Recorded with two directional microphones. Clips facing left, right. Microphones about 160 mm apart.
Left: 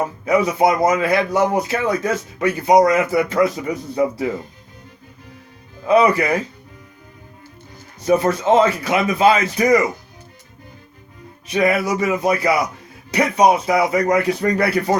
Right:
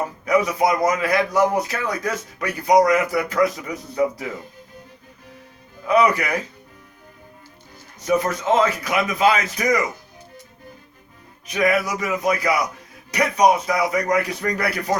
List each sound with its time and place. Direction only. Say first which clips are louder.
0.3 s speech: left 3 dB; 25° left (ahead or behind)
5.9 s speech: left 3 dB; 25° left (ahead or behind)
8.0 s speech: left 4 dB; 30° left (ahead or behind)
11.4 s speech: left 3 dB; 30° left (ahead or behind)